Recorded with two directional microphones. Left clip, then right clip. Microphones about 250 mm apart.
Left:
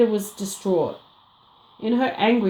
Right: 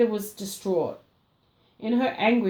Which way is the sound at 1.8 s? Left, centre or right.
Left.